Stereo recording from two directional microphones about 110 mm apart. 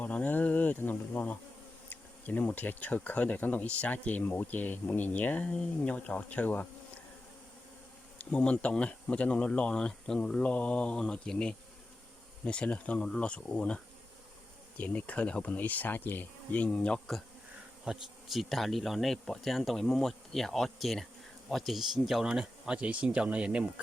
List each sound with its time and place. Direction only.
0.0 s speech: 15° left (ahead or behind)
8.2 s speech: 10° left (ahead or behind); by 23.8 s 10° right (ahead or behind)